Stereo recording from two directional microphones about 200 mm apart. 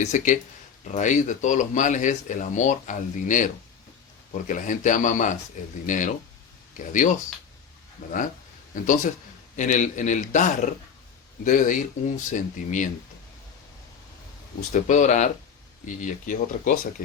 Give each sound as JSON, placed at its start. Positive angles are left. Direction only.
{"t": 0.0, "sound": "speech", "side_deg": 35}
{"t": 14.7, "sound": "speech", "side_deg": 40}